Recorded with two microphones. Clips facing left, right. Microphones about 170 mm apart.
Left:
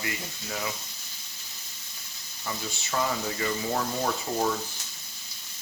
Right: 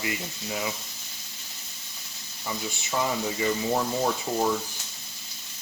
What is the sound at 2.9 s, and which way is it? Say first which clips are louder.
Speech: right 1 dB; 15° right (ahead or behind).